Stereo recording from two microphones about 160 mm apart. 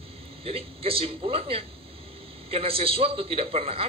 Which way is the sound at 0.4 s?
35° right (ahead or behind).